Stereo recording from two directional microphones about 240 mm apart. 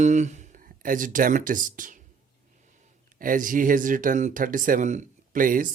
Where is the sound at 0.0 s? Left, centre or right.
Right.